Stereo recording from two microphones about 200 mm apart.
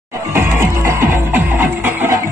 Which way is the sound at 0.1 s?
15° right (ahead or behind).